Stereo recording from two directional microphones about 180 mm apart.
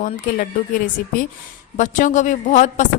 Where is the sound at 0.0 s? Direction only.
50° left (ahead or behind).